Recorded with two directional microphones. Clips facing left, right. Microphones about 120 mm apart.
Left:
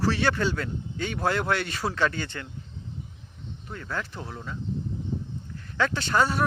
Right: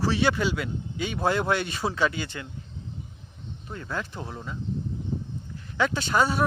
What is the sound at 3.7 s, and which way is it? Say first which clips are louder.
Speech: right 1 dB; 20° right (ahead or behind).